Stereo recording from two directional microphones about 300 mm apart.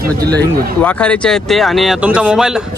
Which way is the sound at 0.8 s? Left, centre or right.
Centre.